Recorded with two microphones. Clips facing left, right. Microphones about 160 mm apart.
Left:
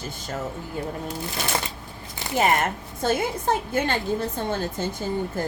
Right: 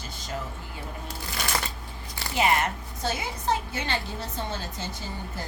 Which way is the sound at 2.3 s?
50° left (ahead or behind).